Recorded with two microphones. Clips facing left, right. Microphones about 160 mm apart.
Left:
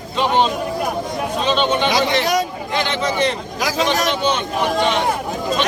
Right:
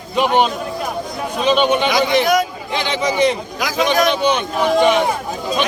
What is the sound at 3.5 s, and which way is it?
Speech, 35° left (ahead or behind).